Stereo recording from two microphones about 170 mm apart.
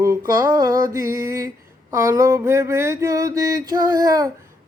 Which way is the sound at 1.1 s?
15° right (ahead or behind).